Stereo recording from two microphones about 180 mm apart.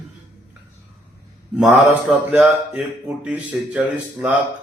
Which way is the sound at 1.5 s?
5° right (ahead or behind).